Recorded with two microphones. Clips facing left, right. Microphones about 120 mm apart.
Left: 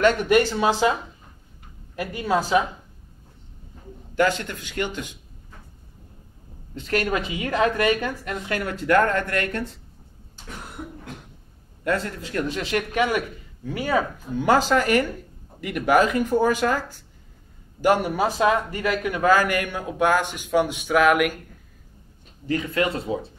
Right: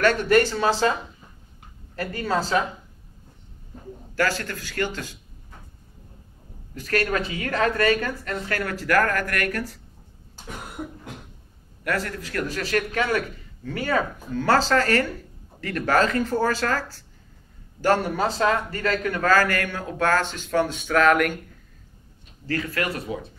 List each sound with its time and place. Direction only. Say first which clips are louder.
0.0 s a man's voice: left 1 dB; 15° left (ahead or behind)
2.0 s a man's voice: left 2 dB; 15° left (ahead or behind)
4.1 s a woman's voice: left 3 dB; 20° left (ahead or behind)
6.7 s a woman's voice: even; 20° left (ahead or behind)
11.8 s a woman's voice: left 2 dB; 25° left (ahead or behind)
22.5 s a woman's voice: left 3 dB; 20° left (ahead or behind)